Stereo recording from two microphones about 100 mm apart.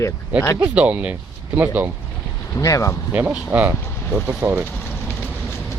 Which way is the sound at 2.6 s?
35° left (ahead or behind).